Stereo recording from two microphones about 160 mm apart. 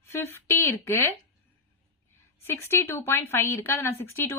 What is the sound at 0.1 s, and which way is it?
Speech, 15° left (ahead or behind).